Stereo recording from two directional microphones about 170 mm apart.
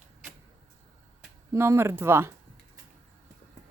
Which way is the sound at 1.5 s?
15° right (ahead or behind).